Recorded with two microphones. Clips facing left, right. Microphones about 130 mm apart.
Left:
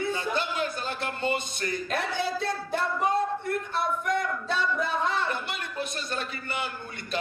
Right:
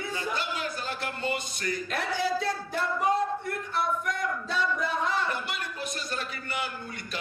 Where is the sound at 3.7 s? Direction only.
25° left (ahead or behind).